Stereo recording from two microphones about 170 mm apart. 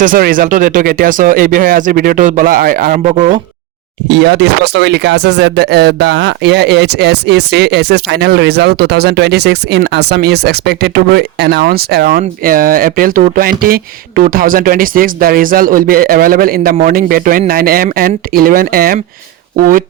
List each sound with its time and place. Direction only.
0.0 s speech: 55° right (ahead or behind)
4.1 s speech: 80° right; by 18.9 s 60° right (ahead or behind)